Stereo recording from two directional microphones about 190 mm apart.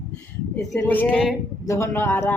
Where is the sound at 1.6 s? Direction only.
15° left (ahead or behind).